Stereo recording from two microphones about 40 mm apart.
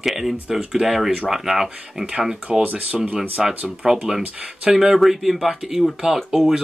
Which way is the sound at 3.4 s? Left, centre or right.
Centre.